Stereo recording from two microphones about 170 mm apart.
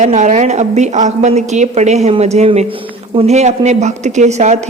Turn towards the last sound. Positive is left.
turn(degrees=-40)  # may be behind; listen again after turning